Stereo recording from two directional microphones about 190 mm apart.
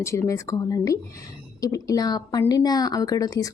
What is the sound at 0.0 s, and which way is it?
Speech, 15° left (ahead or behind).